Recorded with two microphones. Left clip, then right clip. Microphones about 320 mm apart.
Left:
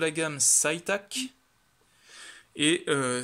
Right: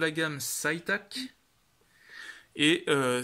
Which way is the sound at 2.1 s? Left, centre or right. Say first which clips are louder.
Right 2 dB; centre.